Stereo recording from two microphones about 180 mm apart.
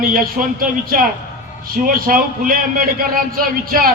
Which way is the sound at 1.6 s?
55° right (ahead or behind).